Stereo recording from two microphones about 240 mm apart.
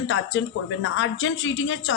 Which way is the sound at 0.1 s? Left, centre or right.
Left.